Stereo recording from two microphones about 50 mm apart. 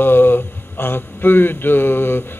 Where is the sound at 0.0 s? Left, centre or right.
Left.